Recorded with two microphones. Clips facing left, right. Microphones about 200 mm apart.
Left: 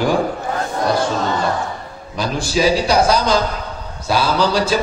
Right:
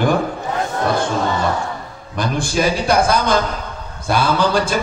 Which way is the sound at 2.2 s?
55° right (ahead or behind).